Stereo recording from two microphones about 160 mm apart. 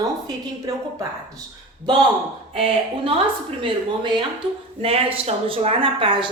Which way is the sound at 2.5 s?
35° right (ahead or behind).